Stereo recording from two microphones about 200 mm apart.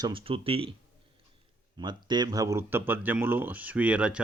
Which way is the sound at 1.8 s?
20° right (ahead or behind).